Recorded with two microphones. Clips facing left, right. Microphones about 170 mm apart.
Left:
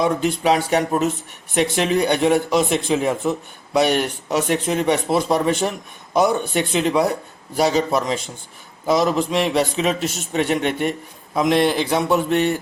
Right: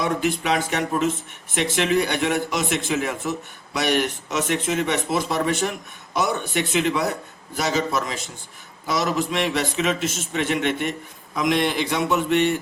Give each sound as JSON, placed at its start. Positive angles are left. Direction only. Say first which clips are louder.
{"t": 0.4, "sound": "a man's voice", "louder": "left 5 dB", "side_deg": 35}